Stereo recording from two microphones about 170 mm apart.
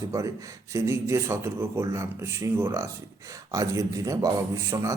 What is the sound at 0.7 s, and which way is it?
A man's voice, 15° right (ahead or behind).